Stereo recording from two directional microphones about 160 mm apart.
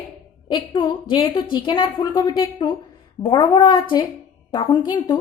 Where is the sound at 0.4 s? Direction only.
30° left (ahead or behind).